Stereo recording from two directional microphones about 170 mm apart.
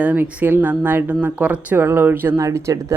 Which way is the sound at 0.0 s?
10° right (ahead or behind).